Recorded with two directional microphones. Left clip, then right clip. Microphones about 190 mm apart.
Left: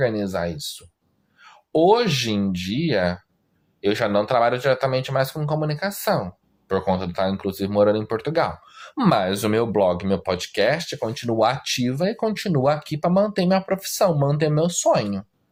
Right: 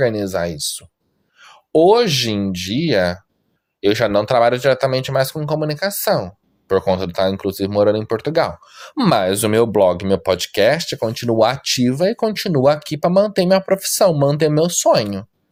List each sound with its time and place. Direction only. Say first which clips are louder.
0.0 s speech: right 5 dB; 40° right (ahead or behind)